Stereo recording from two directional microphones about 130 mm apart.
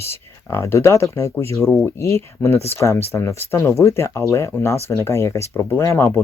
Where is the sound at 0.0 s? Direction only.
20° left (ahead or behind).